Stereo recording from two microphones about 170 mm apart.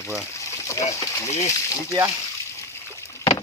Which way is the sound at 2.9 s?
15° left (ahead or behind).